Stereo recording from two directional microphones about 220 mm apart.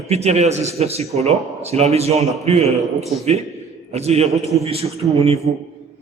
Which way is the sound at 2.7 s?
Centre (ahead or behind).